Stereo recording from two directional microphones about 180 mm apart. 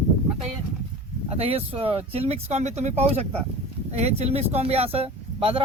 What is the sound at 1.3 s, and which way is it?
Speech, 35° right (ahead or behind).